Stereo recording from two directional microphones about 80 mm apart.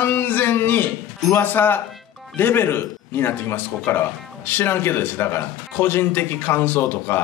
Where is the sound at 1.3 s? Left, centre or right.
Left.